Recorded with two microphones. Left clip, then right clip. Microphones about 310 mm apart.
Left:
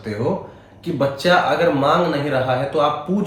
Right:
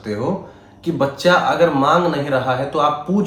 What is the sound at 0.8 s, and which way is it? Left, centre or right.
Speech, centre.